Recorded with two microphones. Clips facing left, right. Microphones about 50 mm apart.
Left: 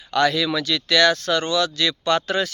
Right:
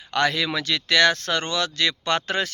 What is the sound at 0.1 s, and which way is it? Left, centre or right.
Speech, right.